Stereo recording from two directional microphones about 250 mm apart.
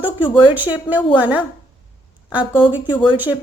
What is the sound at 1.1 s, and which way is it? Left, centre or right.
Speech, centre.